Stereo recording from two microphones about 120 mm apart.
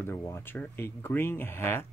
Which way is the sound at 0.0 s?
20° left (ahead or behind).